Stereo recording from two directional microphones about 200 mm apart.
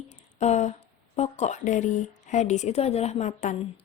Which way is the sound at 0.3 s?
35° left (ahead or behind).